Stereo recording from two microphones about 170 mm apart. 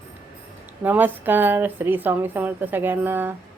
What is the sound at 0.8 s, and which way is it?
Speech, 10° right (ahead or behind).